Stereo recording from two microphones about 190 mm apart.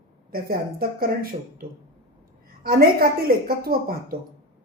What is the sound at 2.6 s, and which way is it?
A woman's voice, 50° right (ahead or behind).